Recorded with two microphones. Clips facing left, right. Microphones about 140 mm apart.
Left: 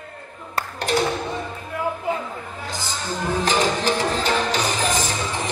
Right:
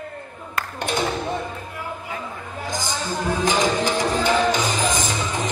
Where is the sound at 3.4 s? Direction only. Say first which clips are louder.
Right 1 dB; 15° right (ahead or behind).